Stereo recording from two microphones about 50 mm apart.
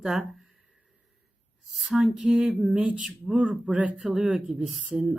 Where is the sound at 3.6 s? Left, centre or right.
Right.